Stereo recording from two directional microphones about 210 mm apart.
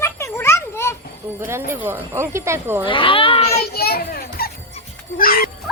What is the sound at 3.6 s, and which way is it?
Children playing, 45° left (ahead or behind).